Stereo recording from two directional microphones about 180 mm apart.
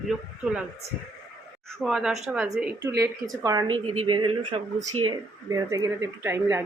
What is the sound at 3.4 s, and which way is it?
Speech, 20° right (ahead or behind).